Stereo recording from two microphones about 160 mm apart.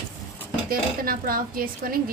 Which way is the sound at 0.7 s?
65° right (ahead or behind).